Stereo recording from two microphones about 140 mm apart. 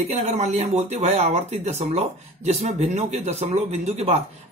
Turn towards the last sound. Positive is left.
turn(degrees=-50)  # may be behind; listen again after turning